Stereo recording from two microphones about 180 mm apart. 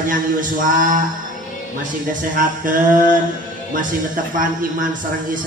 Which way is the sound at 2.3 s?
50° right (ahead or behind).